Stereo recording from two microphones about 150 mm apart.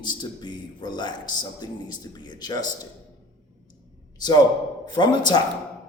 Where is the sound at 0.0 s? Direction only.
30° left (ahead or behind).